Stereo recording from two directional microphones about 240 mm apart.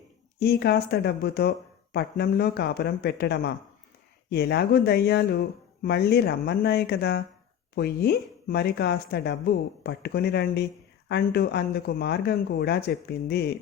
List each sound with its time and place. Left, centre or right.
0.3 s speech: left